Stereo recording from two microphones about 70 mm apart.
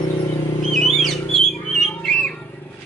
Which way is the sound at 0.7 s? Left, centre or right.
Centre.